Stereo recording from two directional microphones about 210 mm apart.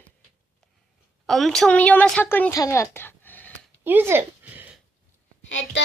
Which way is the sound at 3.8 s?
10° right (ahead or behind).